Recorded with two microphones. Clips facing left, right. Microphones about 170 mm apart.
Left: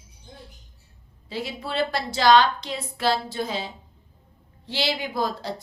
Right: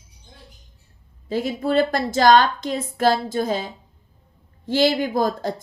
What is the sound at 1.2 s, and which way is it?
A woman's voice, 50° right (ahead or behind).